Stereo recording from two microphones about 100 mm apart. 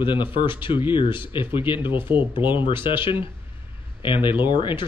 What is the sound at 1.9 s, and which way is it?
Speech, 20° right (ahead or behind).